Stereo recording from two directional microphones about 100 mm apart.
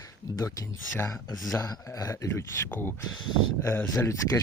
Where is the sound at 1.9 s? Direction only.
35° left (ahead or behind).